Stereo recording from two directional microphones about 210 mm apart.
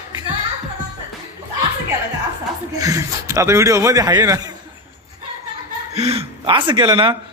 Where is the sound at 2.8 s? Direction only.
15° right (ahead or behind).